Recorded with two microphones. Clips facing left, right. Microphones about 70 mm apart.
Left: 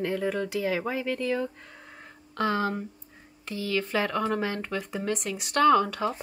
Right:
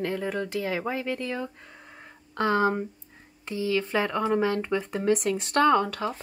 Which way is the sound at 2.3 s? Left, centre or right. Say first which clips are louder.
Right 3 dB; centre.